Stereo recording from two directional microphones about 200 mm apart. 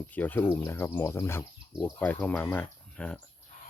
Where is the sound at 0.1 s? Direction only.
10° left (ahead or behind).